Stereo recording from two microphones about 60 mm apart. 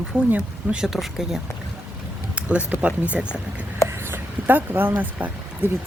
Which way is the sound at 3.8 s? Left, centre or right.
Right.